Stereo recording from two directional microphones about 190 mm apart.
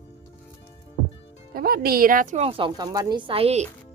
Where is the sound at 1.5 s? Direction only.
50° right (ahead or behind).